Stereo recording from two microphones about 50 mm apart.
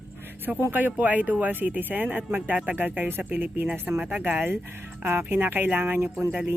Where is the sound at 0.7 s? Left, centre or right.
Right.